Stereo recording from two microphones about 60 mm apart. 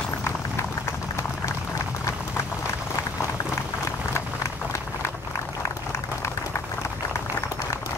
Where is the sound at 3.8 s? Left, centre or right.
Left.